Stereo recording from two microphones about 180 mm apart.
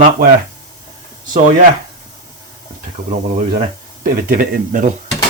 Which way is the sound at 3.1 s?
40° right (ahead or behind).